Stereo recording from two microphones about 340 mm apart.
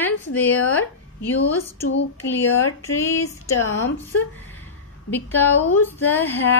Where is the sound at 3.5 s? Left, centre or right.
Left.